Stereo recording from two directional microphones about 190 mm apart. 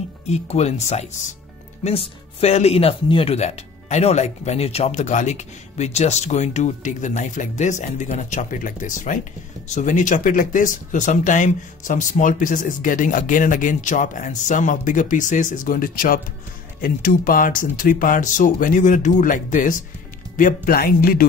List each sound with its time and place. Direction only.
0.3 s speech: 35° left (ahead or behind)